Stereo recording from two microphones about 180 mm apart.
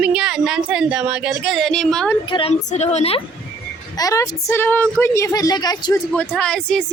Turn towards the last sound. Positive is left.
turn(degrees=5)  # may be behind; listen again after turning